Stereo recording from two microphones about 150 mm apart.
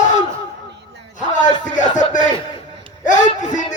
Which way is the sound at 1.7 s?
55° left (ahead or behind).